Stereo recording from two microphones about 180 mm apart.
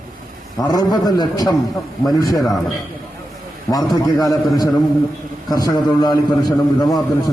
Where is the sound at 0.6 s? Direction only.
20° left (ahead or behind).